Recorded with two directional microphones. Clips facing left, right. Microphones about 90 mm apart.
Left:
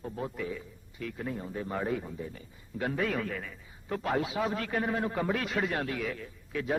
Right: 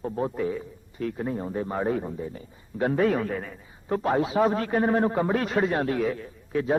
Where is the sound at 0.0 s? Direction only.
35° right (ahead or behind).